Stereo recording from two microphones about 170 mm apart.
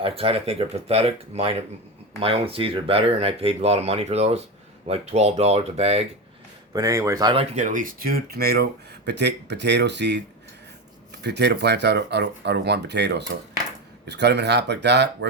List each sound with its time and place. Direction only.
0.0 s speech: 35° right (ahead or behind)
6.7 s speech: 20° right (ahead or behind)
7.5 s speech: 50° right (ahead or behind); by 8.6 s 65° right (ahead or behind)
9.0 s speech: 80° right